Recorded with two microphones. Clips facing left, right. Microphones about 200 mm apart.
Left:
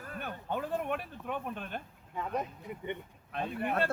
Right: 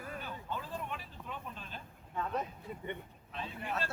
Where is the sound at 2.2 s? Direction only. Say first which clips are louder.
Left 2 dB; 15° left (ahead or behind).